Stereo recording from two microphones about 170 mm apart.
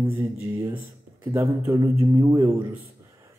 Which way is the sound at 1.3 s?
15° right (ahead or behind).